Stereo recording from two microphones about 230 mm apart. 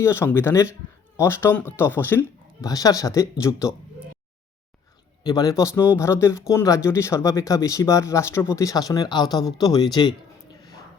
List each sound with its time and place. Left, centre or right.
0.0 s speech: centre
5.2 s speech: centre